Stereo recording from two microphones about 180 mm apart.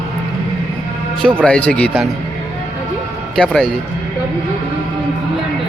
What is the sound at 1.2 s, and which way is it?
Speech, 5° left (ahead or behind).